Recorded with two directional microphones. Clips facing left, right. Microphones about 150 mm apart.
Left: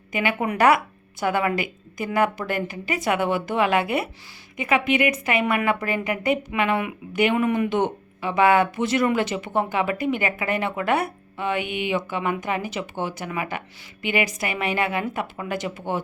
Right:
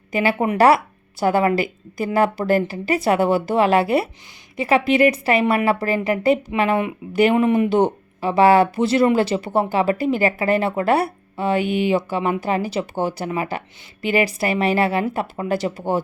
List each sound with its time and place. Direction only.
0.1 s a woman's voice: 35° right (ahead or behind)